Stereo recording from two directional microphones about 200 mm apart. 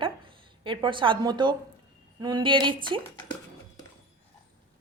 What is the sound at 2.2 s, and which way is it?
Speech, 20° right (ahead or behind).